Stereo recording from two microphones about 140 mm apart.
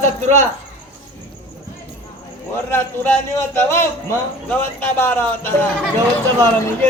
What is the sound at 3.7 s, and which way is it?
A man's voice, 20° left (ahead or behind).